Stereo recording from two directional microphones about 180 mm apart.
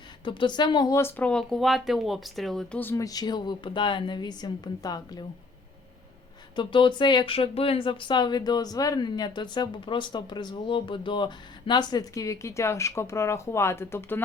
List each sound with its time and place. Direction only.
0.3 s speech: 25° left (ahead or behind)
6.6 s speech: 25° left (ahead or behind)